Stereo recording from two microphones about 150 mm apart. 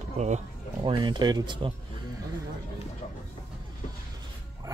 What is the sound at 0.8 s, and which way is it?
Speech, 30° right (ahead or behind).